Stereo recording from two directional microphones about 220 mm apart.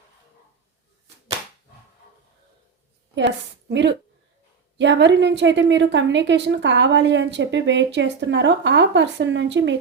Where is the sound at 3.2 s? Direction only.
55° right (ahead or behind).